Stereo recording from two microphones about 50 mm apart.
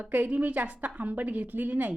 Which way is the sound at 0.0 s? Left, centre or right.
Right.